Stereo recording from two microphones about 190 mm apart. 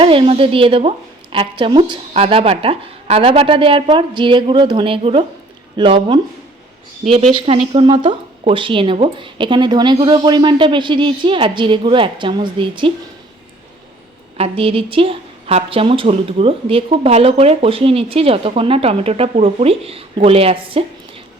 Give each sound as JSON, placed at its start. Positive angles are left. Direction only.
{"t": 0.0, "sound": "a woman's voice", "side_deg": -30}
{"t": 14.3, "sound": "speech", "side_deg": -30}